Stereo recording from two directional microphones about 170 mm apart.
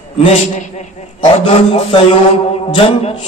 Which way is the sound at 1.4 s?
35° left (ahead or behind).